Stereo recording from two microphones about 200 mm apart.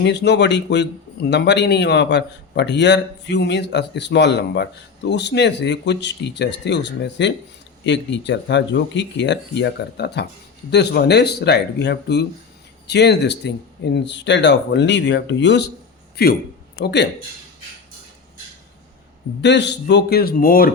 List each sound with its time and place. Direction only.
0.0 s a man's voice: 60° left (ahead or behind)
19.4 s a man's voice: 60° left (ahead or behind)